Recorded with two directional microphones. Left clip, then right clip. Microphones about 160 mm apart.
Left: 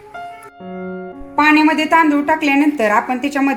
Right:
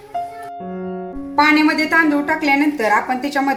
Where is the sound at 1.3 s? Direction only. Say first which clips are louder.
Left 2 dB; 50° left (ahead or behind).